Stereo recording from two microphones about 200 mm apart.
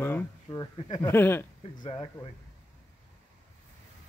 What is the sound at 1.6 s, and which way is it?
Speech, 25° left (ahead or behind).